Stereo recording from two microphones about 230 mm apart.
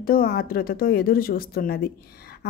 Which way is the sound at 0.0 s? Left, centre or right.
Left.